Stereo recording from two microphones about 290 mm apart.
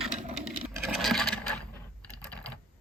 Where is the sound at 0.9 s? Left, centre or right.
Centre.